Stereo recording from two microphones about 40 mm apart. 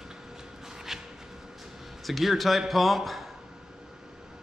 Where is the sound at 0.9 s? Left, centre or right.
Centre.